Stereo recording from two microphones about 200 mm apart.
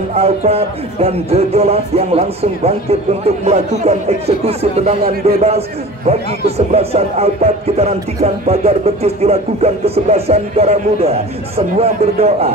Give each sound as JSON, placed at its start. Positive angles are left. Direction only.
{"t": 0.1, "sound": "music", "side_deg": -30}